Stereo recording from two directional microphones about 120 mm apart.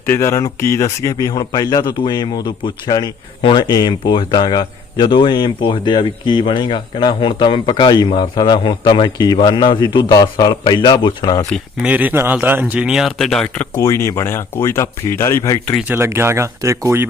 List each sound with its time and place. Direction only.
0.0 s speech: 20° left (ahead or behind); by 11.4 s 35° left (ahead or behind)
11.8 s speech: 10° right (ahead or behind); by 13.7 s 5° left (ahead or behind)
13.7 s speech: 25° left (ahead or behind)
15.9 s speech: 20° right (ahead or behind)